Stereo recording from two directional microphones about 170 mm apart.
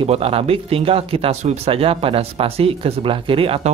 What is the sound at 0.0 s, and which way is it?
Speech, 35° right (ahead or behind).